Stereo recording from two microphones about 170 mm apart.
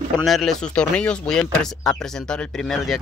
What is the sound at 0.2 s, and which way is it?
Speech, centre (ahead or behind).